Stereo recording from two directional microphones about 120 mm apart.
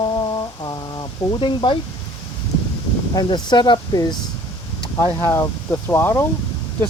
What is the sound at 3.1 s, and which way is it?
Speech, 35° left (ahead or behind).